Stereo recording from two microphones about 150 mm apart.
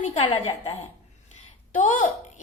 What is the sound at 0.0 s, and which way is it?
Speech, 50° left (ahead or behind).